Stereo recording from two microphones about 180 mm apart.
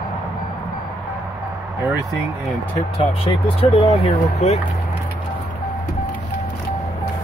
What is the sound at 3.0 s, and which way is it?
Speech, 30° left (ahead or behind).